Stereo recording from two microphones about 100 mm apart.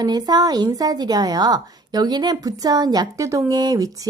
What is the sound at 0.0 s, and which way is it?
A woman's voice, 40° right (ahead or behind).